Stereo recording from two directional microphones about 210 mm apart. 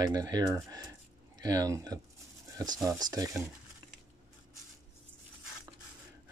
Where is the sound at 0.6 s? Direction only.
20° right (ahead or behind).